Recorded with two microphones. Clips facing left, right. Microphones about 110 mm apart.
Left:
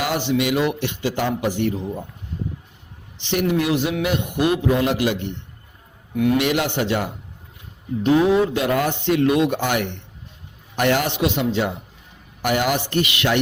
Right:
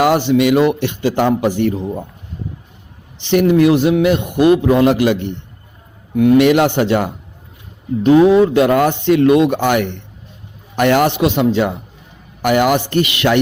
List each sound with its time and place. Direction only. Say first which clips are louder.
0.0 s a man's voice: right 9 dB; 50° right (ahead or behind)
3.3 s a man's voice: right 9 dB; 55° right (ahead or behind)
6.1 s a man's voice: right 8 dB; 45° right (ahead or behind)
6.4 s a man's voice: right 9 dB; 55° right (ahead or behind)
8.0 s a man's voice: right 7 dB; 70° right (ahead or behind)